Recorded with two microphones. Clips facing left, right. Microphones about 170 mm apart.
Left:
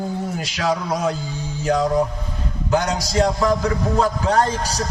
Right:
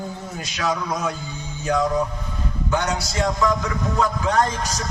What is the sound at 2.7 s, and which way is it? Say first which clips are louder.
A man's voice: left 4 dB; 35° left (ahead or behind).